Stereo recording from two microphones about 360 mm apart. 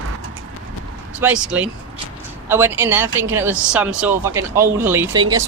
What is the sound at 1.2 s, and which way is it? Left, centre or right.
Speech, centre.